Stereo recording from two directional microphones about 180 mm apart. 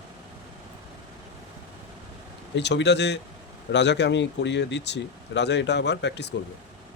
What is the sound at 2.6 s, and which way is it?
A man's voice, 70° left (ahead or behind).